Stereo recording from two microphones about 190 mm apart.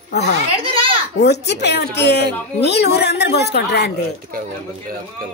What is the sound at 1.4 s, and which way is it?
Speech, 65° left (ahead or behind).